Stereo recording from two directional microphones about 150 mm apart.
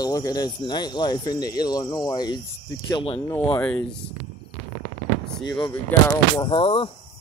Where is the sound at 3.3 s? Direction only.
10° left (ahead or behind).